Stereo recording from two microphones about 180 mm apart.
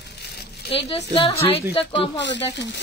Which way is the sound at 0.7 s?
30° left (ahead or behind).